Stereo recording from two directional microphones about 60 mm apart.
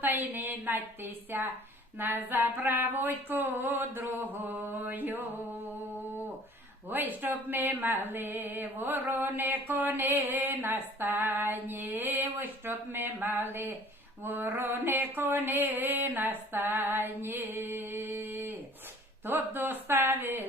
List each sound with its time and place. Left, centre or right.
0.0 s speech: right
6.9 s speech: right